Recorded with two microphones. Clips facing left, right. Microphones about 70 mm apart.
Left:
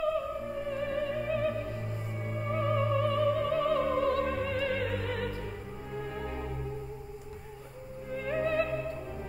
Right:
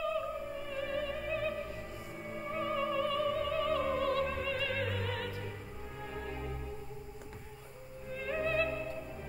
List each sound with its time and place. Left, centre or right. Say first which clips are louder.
0.7 s music: left 4 dB; left
2.5 s music: left 4 dB; left
3.9 s opera: left 4 dB; left
6.1 s music: left 4 dB; left
8.1 s music: left 4 dB; left